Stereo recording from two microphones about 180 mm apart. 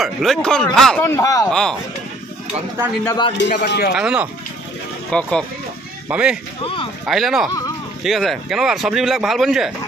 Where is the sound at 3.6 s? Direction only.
65° left (ahead or behind).